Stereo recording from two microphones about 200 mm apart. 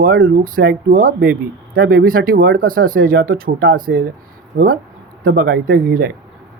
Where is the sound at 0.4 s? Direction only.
45° right (ahead or behind).